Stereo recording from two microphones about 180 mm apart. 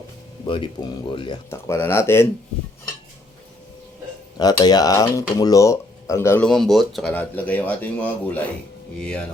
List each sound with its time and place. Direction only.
0.4 s speech: 25° left (ahead or behind)
1.5 s speech: 15° left (ahead or behind)
4.4 s speech: 20° left (ahead or behind)
6.5 s speech: centre (ahead or behind)